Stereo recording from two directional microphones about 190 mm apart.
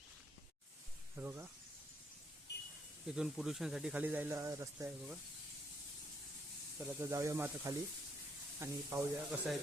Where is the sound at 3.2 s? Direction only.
Centre (ahead or behind).